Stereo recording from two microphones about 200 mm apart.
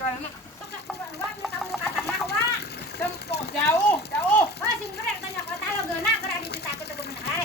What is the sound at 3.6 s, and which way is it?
Speech, 15° left (ahead or behind).